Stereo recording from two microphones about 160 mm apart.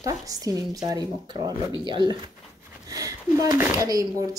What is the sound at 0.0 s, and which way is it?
Speech, 20° right (ahead or behind).